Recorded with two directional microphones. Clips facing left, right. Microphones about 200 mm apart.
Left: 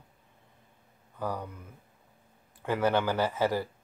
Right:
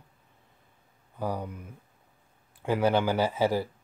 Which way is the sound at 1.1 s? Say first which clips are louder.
Right 2 dB; 10° right (ahead or behind).